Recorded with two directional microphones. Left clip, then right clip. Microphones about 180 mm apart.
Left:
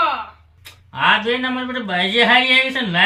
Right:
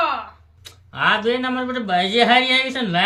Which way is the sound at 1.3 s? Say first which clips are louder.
Left 1 dB; 30° right (ahead or behind).